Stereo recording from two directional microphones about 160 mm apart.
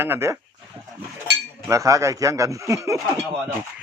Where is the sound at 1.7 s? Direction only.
20° right (ahead or behind).